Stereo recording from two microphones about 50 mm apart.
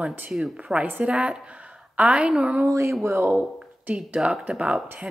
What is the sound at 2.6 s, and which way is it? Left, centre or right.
Speech, right.